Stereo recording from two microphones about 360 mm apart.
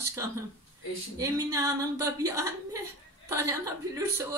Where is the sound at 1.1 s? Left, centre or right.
Centre.